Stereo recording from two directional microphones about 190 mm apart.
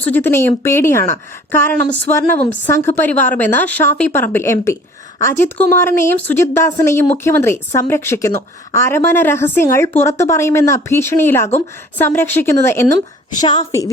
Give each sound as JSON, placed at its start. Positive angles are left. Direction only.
{"t": 0.0, "sound": "a woman's voice", "side_deg": 10}